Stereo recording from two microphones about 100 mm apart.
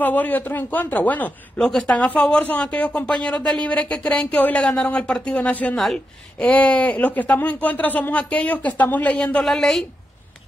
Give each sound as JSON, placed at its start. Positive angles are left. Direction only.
{"t": 0.0, "sound": "speech", "side_deg": 15}